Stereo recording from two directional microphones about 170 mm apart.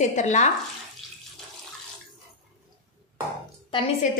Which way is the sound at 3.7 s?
30° left (ahead or behind).